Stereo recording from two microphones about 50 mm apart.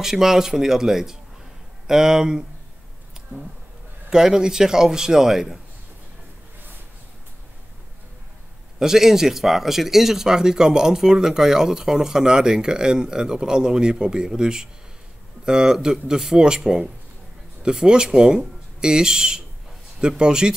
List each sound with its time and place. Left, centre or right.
0.0 s speech: centre
4.1 s speech: centre
8.7 s speech: centre